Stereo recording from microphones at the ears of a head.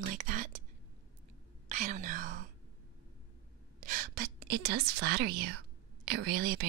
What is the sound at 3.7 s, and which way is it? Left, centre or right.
A woman's voice, right.